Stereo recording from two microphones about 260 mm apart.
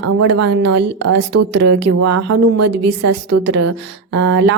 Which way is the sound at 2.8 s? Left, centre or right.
Right.